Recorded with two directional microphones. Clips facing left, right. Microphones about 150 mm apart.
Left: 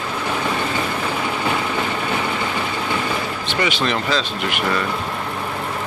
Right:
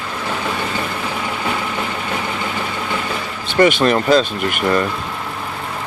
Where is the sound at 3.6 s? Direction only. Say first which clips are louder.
Right 8 dB; 50° right (ahead or behind).